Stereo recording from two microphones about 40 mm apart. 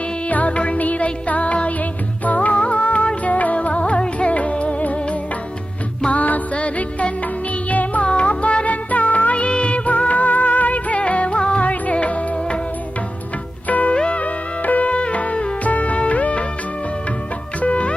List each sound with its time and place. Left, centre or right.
0.3 s music: left
6.1 s music: left
6.6 s music: left
11.6 s music: left
13.7 s music: left
13.9 s music: left
17.6 s music: left